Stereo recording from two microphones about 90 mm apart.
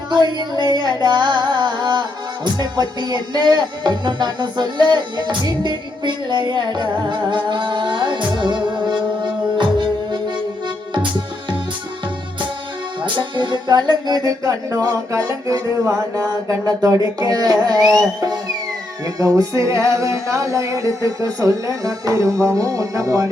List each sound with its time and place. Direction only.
0.3 s carnatic music: 50° right (ahead or behind)
9.6 s music: 60° right (ahead or behind)
13.0 s music: 65° right (ahead or behind); by 23.3 s 40° right (ahead or behind)